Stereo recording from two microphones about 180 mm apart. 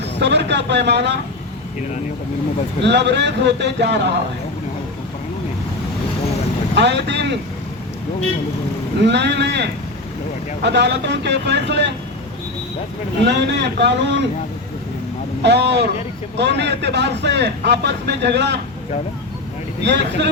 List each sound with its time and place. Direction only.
0.2 s speech: 75° right (ahead or behind)
2.8 s speech: 75° right (ahead or behind)
6.7 s speech: 75° right (ahead or behind)
9.0 s speech: 75° right (ahead or behind)
13.2 s speech: 70° right (ahead or behind)
15.4 s speech: 70° right (ahead or behind)
19.8 s speech: 70° right (ahead or behind)